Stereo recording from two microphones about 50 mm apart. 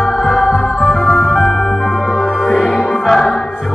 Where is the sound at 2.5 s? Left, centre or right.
Centre.